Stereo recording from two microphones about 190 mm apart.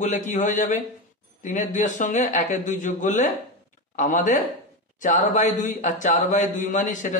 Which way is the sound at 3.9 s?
45° left (ahead or behind).